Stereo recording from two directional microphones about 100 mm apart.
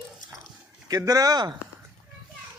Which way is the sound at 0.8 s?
35° right (ahead or behind).